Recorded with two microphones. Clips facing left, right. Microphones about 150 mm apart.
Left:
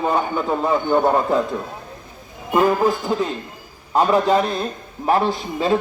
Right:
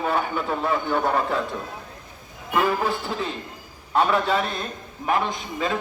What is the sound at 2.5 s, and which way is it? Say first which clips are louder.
A man's voice: left 6 dB; 40° left (ahead or behind).